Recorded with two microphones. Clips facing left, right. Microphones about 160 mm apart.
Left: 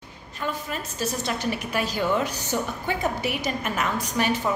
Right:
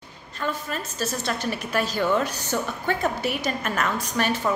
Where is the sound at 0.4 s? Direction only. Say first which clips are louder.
Right 1 dB; 15° left (ahead or behind).